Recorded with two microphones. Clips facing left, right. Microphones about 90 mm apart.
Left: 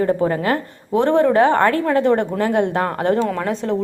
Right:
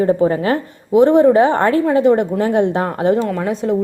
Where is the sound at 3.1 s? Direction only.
5° right (ahead or behind).